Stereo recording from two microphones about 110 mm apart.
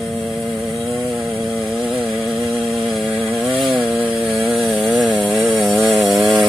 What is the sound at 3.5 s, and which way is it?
Chainsaw, 45° right (ahead or behind).